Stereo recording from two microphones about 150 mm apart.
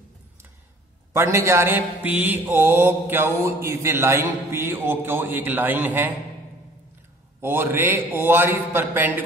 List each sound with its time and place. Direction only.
1.1 s mantra: 15° right (ahead or behind)
7.3 s mantra: 15° right (ahead or behind)